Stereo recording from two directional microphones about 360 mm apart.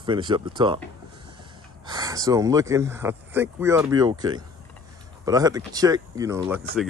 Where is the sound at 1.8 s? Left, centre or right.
Centre.